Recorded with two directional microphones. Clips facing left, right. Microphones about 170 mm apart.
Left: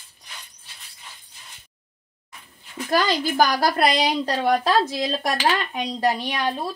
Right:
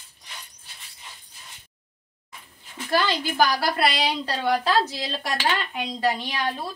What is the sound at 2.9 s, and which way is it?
Speech, 40° left (ahead or behind).